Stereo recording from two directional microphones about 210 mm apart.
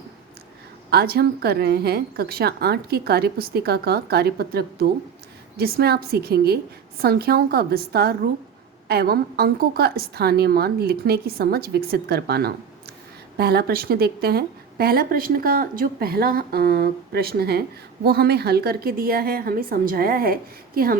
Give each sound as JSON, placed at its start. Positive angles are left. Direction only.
{"t": 0.9, "sound": "a woman's voice", "side_deg": -50}